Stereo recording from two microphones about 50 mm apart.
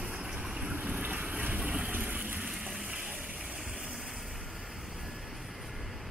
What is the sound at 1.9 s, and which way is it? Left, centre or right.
Vehicle, right.